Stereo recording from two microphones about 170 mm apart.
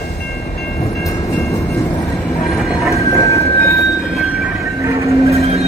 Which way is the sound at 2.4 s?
Centre (ahead or behind).